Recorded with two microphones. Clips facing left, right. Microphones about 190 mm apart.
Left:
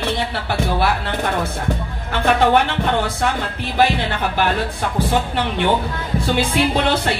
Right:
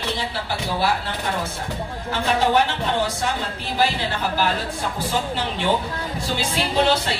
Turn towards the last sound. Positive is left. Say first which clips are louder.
# left 2 dB
turn(degrees=60)  # may be behind; listen again after turning